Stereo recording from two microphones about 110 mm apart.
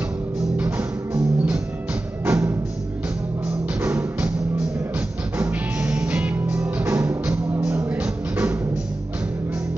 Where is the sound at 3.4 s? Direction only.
15° right (ahead or behind).